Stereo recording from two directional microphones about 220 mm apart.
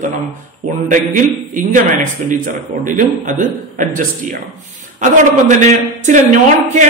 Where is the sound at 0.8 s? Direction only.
35° right (ahead or behind).